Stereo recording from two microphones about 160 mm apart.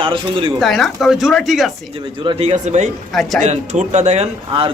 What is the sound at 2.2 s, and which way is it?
Speech, 40° right (ahead or behind).